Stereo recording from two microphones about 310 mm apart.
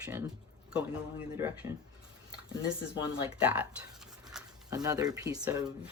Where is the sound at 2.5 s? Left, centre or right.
Centre.